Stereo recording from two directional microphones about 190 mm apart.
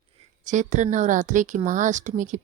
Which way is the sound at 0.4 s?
40° right (ahead or behind).